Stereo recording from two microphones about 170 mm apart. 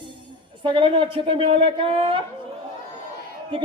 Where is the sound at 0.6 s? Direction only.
30° right (ahead or behind).